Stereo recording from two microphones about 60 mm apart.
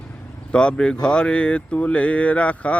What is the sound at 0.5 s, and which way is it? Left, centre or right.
Speech, centre.